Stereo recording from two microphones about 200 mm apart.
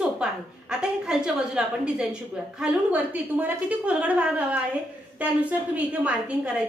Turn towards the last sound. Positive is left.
turn(degrees=-5)  # may be behind; listen again after turning